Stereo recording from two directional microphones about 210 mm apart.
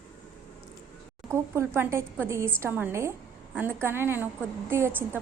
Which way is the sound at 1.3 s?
10° right (ahead or behind).